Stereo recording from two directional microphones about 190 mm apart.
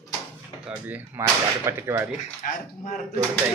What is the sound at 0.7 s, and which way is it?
Speech, 10° right (ahead or behind).